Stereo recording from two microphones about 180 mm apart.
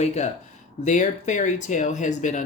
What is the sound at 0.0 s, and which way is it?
Speech, 40° left (ahead or behind).